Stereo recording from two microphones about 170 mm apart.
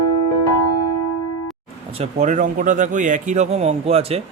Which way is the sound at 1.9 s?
40° right (ahead or behind).